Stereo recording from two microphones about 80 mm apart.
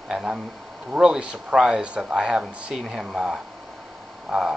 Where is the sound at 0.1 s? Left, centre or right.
Centre.